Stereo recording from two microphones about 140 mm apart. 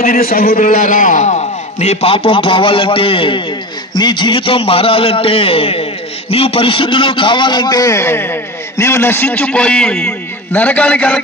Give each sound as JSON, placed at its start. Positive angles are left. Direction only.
{"t": 0.0, "sound": "a man's voice", "side_deg": 85}
{"t": 0.7, "sound": "a man's voice", "side_deg": 70}